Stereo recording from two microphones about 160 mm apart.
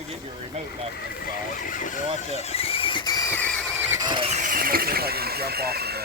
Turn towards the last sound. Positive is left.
turn(degrees=-80)